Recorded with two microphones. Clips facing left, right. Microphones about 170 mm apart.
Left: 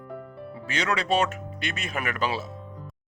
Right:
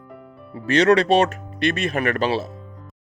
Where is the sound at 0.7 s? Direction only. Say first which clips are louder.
Right 11 dB; 70° right (ahead or behind).